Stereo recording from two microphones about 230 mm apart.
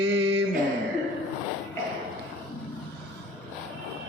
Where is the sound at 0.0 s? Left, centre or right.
Right.